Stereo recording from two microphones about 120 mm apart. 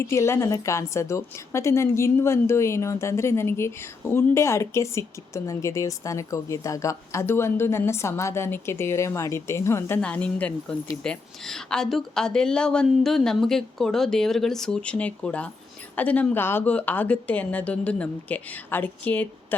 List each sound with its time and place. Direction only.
0.0 s a woman's voice: 25° left (ahead or behind)
10.0 s a woman's voice: 10° left (ahead or behind)